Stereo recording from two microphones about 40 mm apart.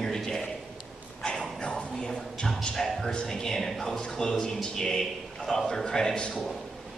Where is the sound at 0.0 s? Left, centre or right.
Centre.